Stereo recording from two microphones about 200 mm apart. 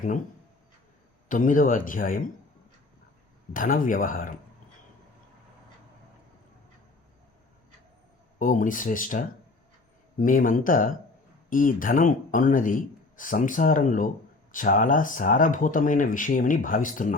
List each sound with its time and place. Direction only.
1.3 s speech: 40° left (ahead or behind)
3.5 s speech: 45° left (ahead or behind)
8.4 s speech: 40° left (ahead or behind)